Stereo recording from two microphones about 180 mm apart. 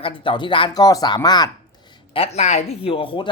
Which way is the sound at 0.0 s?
25° left (ahead or behind).